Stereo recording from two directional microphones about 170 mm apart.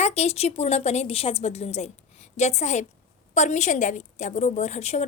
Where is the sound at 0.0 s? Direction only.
40° left (ahead or behind).